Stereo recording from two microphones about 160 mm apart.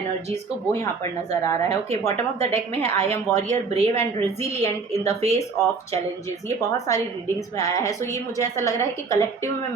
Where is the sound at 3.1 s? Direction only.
15° left (ahead or behind).